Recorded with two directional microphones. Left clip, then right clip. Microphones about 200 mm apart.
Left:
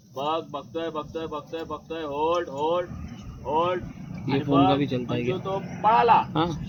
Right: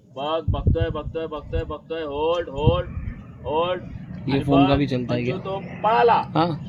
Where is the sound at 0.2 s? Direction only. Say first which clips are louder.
Right 2 dB; 30° right (ahead or behind).